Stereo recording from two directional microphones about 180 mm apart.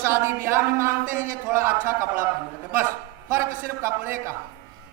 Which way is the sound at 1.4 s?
15° right (ahead or behind).